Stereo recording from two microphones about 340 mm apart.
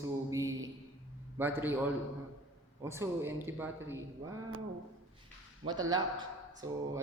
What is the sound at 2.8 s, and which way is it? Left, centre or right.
A woman's voice, centre.